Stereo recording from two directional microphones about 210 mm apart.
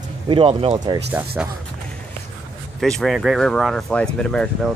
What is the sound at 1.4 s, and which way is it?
Speech, 5° right (ahead or behind).